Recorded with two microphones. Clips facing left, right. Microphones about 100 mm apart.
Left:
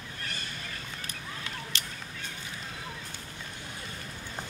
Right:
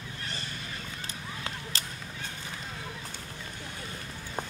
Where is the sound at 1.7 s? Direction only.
35° right (ahead or behind).